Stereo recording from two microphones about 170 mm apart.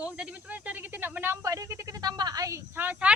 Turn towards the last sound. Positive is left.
turn(degrees=-10)  # may be behind; listen again after turning